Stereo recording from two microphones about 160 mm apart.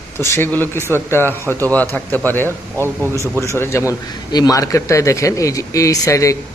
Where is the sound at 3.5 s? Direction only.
15° left (ahead or behind).